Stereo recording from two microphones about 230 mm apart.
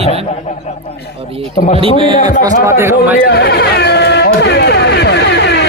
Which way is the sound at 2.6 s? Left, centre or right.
Centre.